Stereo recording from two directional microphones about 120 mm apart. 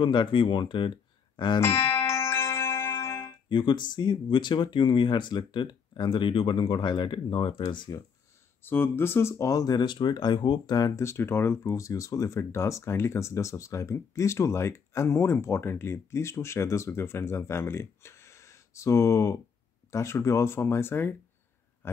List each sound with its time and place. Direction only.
0.0 s speech: 45° left (ahead or behind)
1.6 s music: 20° left (ahead or behind)
3.4 s speech: 40° left (ahead or behind)
8.6 s speech: 20° left (ahead or behind)